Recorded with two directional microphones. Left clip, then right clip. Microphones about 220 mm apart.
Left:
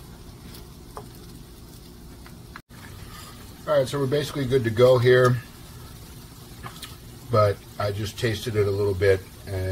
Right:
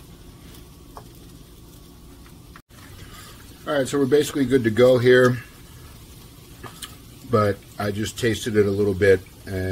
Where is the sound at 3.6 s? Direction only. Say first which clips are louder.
Even; 50° right (ahead or behind).